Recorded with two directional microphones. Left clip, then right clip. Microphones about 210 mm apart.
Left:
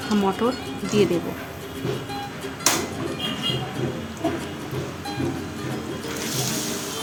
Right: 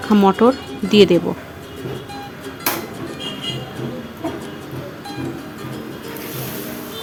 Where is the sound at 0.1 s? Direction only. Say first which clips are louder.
Right 9 dB; 35° right (ahead or behind).